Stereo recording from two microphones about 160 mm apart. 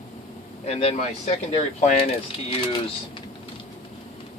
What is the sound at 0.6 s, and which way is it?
Speech, 40° left (ahead or behind).